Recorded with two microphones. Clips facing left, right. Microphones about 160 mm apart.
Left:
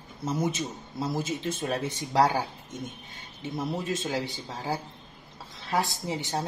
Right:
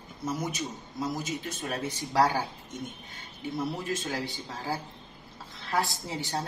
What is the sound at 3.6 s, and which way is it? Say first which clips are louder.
A woman's voice: left 2 dB; 20° left (ahead or behind).